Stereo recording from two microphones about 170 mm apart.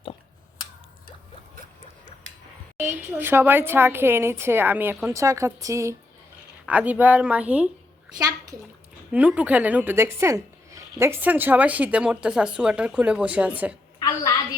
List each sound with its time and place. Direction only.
2.7 s speech: 10° right (ahead or behind)
9.1 s speech: 10° right (ahead or behind)